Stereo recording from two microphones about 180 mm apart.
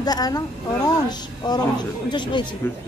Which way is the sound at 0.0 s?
20° left (ahead or behind).